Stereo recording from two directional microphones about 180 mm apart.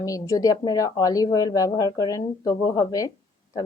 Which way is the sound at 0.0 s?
20° left (ahead or behind).